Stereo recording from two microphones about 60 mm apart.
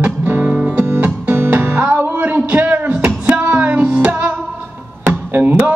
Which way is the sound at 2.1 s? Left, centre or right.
Right.